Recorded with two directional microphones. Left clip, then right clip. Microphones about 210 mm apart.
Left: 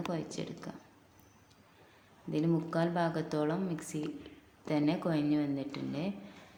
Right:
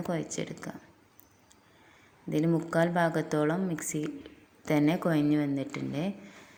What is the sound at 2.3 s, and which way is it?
Speech, 25° right (ahead or behind).